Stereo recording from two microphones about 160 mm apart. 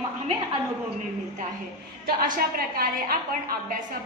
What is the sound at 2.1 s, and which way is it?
A woman's voice, 65° right (ahead or behind).